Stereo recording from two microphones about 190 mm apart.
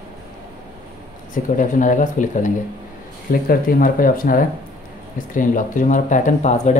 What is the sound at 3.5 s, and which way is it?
Speech, 50° left (ahead or behind).